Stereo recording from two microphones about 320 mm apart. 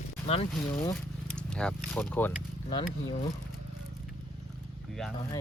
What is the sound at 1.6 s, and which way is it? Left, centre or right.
Speech, centre.